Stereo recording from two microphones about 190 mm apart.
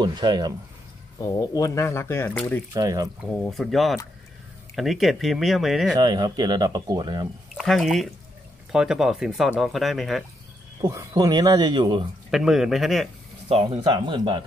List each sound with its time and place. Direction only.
0.0 s speech: 20° right (ahead or behind)
1.2 s speech: 20° left (ahead or behind)
2.7 s speech: 20° right (ahead or behind)
3.5 s speech: centre (ahead or behind)
5.9 s speech: 20° right (ahead or behind)
7.5 s speech: centre (ahead or behind)
10.8 s speech: 15° right (ahead or behind)
12.3 s speech: centre (ahead or behind)
13.5 s speech: 30° right (ahead or behind)